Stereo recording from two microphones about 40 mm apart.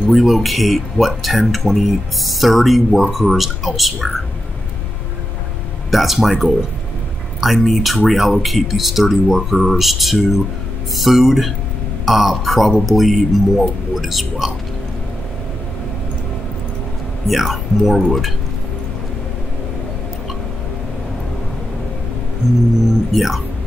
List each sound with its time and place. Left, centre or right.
0.1 s speech: centre
5.9 s speech: centre
17.3 s speech: centre
22.4 s music: centre
23.1 s speech: centre